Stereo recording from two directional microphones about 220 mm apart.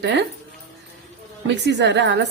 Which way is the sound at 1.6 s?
50° right (ahead or behind).